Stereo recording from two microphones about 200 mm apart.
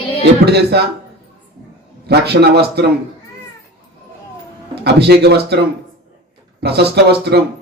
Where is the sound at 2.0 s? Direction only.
55° right (ahead or behind).